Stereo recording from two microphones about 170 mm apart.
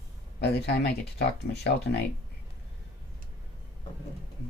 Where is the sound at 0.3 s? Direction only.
75° left (ahead or behind).